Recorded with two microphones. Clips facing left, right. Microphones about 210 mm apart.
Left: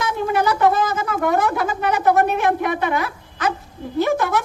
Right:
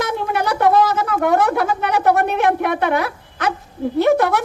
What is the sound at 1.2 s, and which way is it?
Speech, 60° right (ahead or behind).